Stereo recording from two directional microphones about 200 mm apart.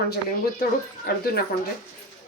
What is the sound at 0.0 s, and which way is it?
Speech, 50° left (ahead or behind).